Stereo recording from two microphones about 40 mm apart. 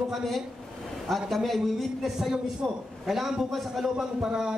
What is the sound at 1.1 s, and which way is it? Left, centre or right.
A man's voice, centre.